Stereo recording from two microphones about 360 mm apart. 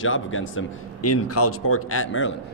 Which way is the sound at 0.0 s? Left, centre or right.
Left.